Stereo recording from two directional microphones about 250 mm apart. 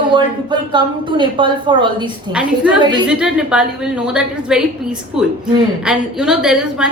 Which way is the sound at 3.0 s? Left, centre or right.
Centre.